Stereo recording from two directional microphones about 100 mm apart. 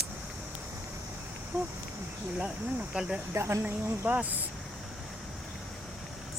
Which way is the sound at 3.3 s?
25° right (ahead or behind).